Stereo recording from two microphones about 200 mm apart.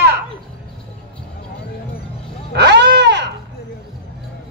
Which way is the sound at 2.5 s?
55° right (ahead or behind).